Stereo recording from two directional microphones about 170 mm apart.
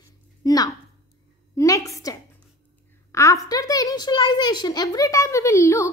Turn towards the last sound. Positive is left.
turn(degrees=15)  # may be behind; listen again after turning